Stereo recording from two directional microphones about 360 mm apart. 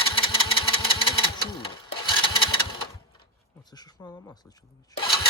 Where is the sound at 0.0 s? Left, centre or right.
Centre.